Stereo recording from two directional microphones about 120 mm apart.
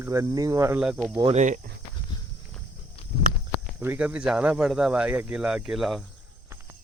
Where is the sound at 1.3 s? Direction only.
90° right.